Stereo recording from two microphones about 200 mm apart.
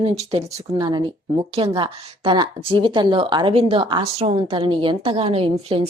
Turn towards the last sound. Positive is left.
turn(degrees=-30)  # may be behind; listen again after turning